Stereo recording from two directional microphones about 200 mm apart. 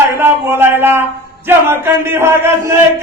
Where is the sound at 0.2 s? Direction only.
10° right (ahead or behind).